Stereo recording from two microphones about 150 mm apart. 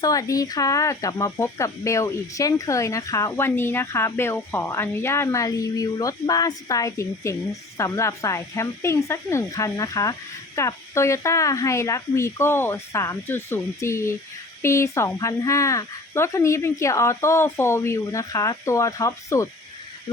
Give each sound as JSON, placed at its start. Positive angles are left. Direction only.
{"t": 0.0, "sound": "speech", "side_deg": 25}